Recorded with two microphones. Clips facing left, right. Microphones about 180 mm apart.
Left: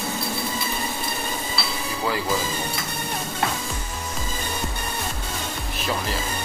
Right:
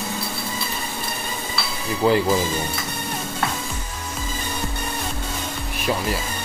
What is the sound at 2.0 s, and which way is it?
Speech, 25° right (ahead or behind).